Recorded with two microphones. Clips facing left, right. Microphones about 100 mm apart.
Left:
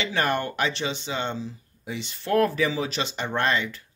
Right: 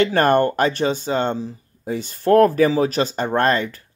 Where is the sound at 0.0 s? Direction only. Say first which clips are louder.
Right 10 dB; 50° right (ahead or behind).